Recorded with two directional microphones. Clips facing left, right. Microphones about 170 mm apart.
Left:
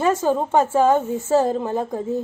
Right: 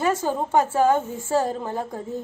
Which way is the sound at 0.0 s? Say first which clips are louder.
Left 4 dB; 25° left (ahead or behind).